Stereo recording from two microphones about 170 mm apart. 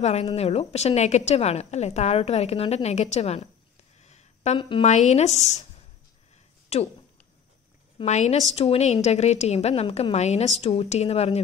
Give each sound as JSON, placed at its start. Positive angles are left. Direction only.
{"t": 0.0, "sound": "a woman's voice", "side_deg": 40}
{"t": 4.0, "sound": "a sound", "side_deg": 40}
{"t": 4.6, "sound": "a woman's voice", "side_deg": 30}
{"t": 4.8, "sound": "a woman's voice", "side_deg": 45}
{"t": 6.7, "sound": "a woman's voice", "side_deg": 40}
{"t": 8.0, "sound": "a woman's voice", "side_deg": 40}